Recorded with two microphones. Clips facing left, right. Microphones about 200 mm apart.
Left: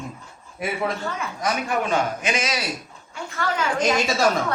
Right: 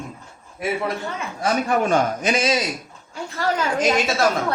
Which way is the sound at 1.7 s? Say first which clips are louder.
Right 4 dB; 40° right (ahead or behind).